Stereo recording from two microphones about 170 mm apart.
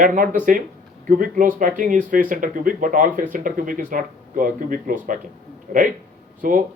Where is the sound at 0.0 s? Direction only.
50° right (ahead or behind).